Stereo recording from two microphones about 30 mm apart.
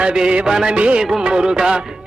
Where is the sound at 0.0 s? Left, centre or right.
Right.